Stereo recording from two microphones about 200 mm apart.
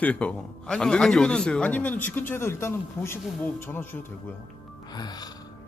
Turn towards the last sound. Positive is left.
turn(degrees=20)  # may be behind; listen again after turning